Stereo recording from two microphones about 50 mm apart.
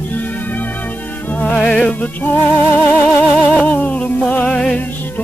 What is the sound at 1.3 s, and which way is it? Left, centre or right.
Music, left.